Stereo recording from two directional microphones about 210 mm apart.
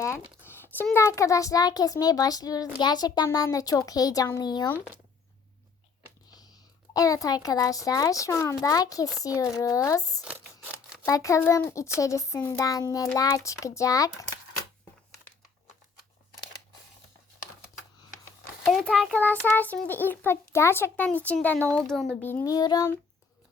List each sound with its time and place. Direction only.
0.0 s a child's voice: 10° left (ahead or behind)
6.3 s a child's voice: 20° left (ahead or behind)
11.0 s a child's voice: 15° left (ahead or behind)
18.6 s a child's voice: centre (ahead or behind)